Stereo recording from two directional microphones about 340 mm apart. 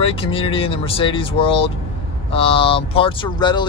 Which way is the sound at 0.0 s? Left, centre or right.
Centre.